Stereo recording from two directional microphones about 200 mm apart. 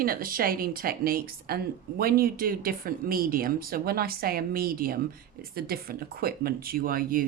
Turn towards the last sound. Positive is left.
turn(degrees=-45)  # may be behind; listen again after turning